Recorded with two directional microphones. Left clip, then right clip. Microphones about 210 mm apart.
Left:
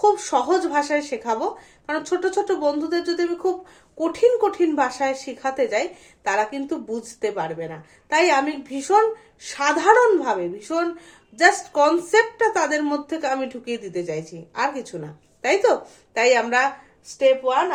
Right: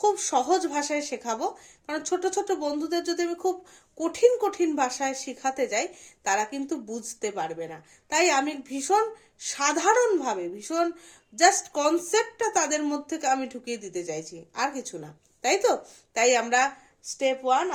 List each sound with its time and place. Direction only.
0.0 s speech: 40° right (ahead or behind)